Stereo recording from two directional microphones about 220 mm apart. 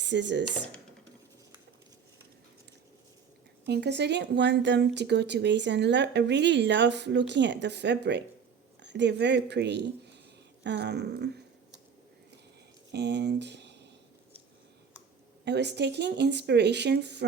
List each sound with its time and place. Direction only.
0.0 s speech: 50° right (ahead or behind)
3.7 s a woman's voice: 50° right (ahead or behind)
12.9 s speech: 50° right (ahead or behind)
15.4 s a woman's voice: 50° right (ahead or behind)